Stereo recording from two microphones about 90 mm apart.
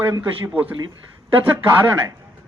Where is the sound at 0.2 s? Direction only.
30° right (ahead or behind).